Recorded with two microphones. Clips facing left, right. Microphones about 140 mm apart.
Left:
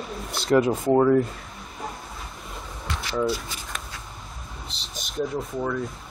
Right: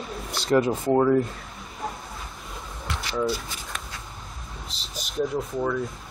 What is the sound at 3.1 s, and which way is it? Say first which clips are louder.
Speech: left 1 dB; centre (ahead or behind).